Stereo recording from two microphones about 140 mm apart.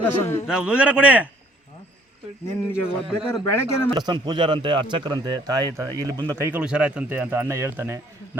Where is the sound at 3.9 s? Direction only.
30° right (ahead or behind).